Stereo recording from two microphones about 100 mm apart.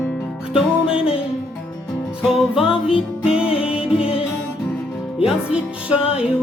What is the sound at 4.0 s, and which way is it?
Music, 70° left (ahead or behind).